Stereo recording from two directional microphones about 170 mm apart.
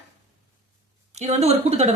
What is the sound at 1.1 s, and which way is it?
Speech, 40° right (ahead or behind).